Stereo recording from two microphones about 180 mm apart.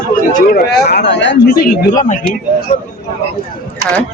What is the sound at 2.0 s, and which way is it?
Speech, 45° left (ahead or behind).